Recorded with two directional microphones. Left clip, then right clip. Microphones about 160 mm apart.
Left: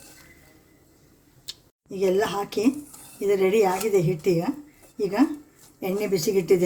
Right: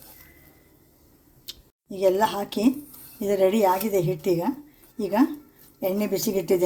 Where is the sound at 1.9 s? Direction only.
35° right (ahead or behind).